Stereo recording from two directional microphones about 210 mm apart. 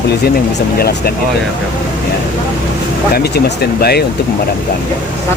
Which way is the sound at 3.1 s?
50° left (ahead or behind).